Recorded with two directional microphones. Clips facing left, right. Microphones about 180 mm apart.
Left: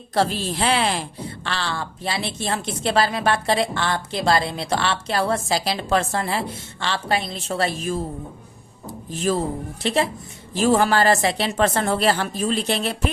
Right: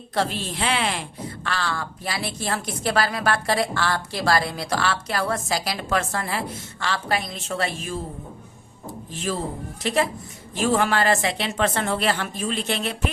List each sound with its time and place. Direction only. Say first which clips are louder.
0.1 s a woman's voice: left 4 dB; 35° left (ahead or behind)
9.3 s speech: left 5 dB; 40° left (ahead or behind)
9.8 s a woman's voice: left 1 dB; 25° left (ahead or behind)